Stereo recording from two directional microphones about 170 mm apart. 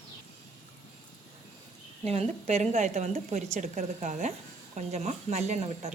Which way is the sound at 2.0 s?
40° right (ahead or behind).